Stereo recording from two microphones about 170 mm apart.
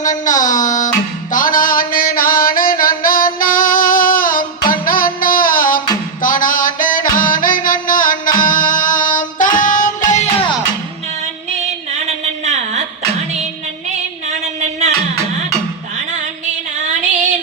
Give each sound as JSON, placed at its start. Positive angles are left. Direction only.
{"t": 0.0, "sound": "music", "side_deg": 50}